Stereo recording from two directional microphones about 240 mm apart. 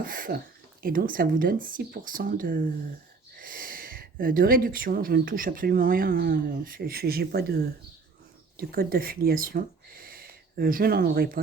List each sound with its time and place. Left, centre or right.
0.0 s speech: right